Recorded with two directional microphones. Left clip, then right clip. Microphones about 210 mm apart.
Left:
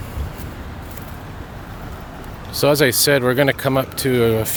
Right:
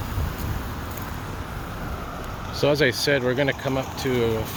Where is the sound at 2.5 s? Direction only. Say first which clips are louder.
Left 5 dB; 35° left (ahead or behind).